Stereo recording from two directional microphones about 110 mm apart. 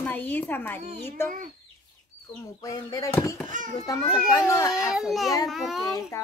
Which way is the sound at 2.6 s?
35° left (ahead or behind).